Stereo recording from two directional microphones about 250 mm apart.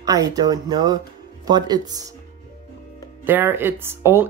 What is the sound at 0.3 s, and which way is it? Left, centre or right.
Speech, centre.